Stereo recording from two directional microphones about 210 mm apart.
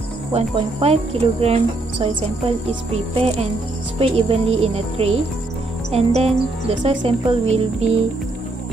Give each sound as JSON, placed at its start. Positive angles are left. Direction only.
{"t": 0.3, "sound": "speech", "side_deg": -30}